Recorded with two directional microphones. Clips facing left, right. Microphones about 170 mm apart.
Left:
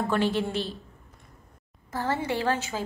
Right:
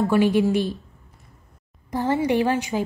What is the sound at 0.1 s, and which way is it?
Speech, 10° right (ahead or behind).